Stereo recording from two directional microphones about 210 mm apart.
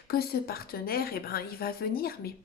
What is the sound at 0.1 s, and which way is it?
A woman's voice, 45° left (ahead or behind).